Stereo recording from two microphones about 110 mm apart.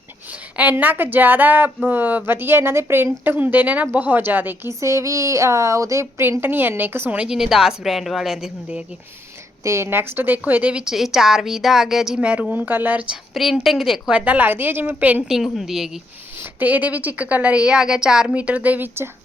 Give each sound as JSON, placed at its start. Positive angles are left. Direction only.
{"t": 0.5, "sound": "speech", "side_deg": -15}
{"t": 7.2, "sound": "a woman's voice", "side_deg": -5}
{"t": 9.6, "sound": "speech", "side_deg": -25}
{"t": 13.3, "sound": "speech", "side_deg": 0}
{"t": 15.5, "sound": "a woman's voice", "side_deg": -5}
{"t": 16.4, "sound": "speech", "side_deg": -15}